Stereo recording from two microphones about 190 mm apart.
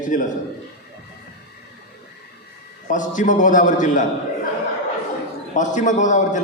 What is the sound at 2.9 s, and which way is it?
A man's voice, 40° left (ahead or behind).